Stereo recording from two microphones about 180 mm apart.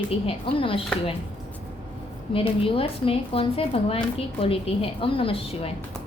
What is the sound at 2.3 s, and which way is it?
A woman's voice, 30° left (ahead or behind).